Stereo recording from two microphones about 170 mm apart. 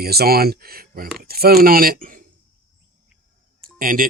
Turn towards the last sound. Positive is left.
turn(degrees=-55)  # may be behind; listen again after turning